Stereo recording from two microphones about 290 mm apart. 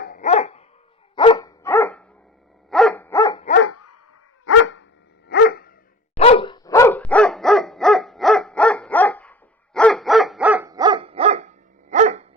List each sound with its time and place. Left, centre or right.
0.0 s dog: left
3.5 s dog: left
4.4 s dog: left
6.1 s dog: centre; by 12.3 s right